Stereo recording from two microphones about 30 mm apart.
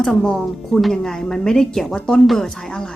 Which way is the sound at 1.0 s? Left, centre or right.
Centre.